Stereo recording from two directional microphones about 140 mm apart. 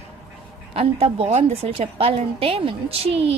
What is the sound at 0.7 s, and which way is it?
A woman's voice, 45° right (ahead or behind).